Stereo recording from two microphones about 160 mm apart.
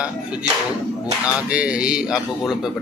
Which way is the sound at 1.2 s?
10° right (ahead or behind).